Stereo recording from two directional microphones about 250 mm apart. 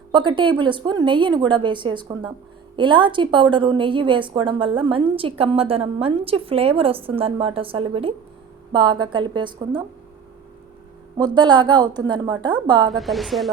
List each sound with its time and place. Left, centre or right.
0.1 s a woman's voice: centre
11.3 s a woman's voice: centre
12.9 s a woman's voice: centre